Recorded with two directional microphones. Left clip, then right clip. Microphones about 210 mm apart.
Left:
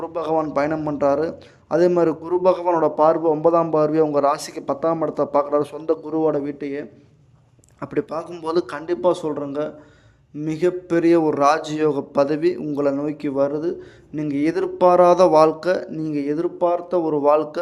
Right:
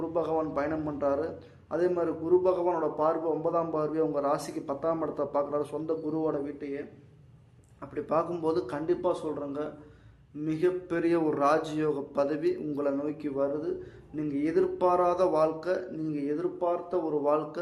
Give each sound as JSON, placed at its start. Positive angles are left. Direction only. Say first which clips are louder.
{"t": 0.0, "sound": "a man's voice", "louder": "left 7 dB", "side_deg": 40}
{"t": 8.2, "sound": "a man's voice", "louder": "left 6 dB", "side_deg": 45}